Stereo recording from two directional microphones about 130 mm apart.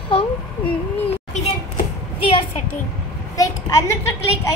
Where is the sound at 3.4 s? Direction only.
25° left (ahead or behind).